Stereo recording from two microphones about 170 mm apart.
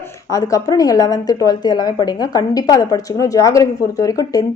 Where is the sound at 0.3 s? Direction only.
20° left (ahead or behind).